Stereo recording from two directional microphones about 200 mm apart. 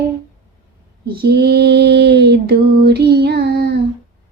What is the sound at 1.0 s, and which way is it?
Female singing, 50° right (ahead or behind).